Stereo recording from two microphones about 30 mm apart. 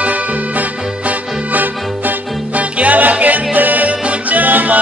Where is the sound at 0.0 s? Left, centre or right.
Right.